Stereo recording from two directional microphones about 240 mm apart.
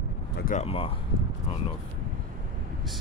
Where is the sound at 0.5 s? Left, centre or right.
Left.